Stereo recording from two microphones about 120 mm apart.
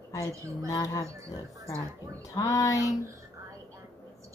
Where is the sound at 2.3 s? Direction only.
30° left (ahead or behind).